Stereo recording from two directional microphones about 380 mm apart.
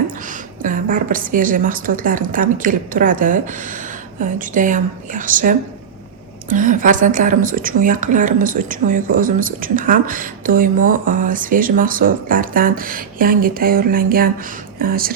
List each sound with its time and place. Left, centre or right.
0.3 s a woman's voice: right